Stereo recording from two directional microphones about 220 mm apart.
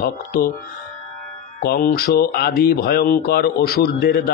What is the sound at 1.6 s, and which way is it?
Speech, 45° left (ahead or behind).